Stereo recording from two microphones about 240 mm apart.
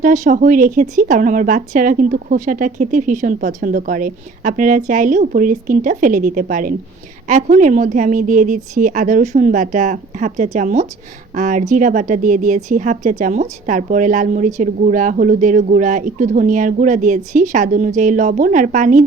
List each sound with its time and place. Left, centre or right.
0.0 s speech: right